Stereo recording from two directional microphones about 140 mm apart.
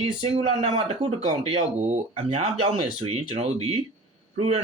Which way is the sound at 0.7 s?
35° right (ahead or behind).